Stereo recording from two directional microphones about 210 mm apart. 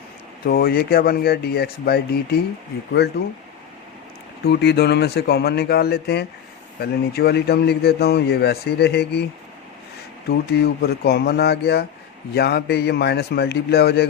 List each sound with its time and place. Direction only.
0.4 s a man's voice: 45° left (ahead or behind)
4.4 s a man's voice: 50° left (ahead or behind)
10.2 s a man's voice: 50° left (ahead or behind)